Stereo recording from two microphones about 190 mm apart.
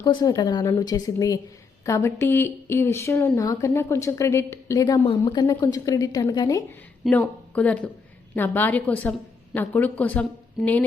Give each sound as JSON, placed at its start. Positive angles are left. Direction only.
{"t": 0.0, "sound": "a woman's voice", "side_deg": 20}
{"t": 7.0, "sound": "speech", "side_deg": 10}